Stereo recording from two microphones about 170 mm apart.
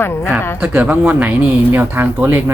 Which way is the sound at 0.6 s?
10° right (ahead or behind).